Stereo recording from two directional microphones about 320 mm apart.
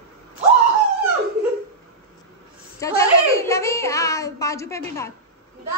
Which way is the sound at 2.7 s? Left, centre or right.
Centre.